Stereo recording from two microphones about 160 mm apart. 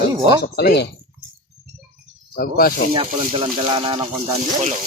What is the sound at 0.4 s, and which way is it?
Speech, 80° left.